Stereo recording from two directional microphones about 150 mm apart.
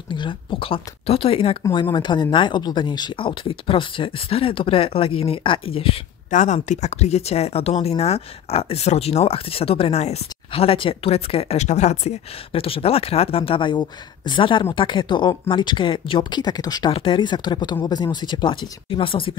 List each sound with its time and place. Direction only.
0.1 s speech: 30° left (ahead or behind)
6.3 s speech: 55° left (ahead or behind); by 19.3 s 35° left (ahead or behind)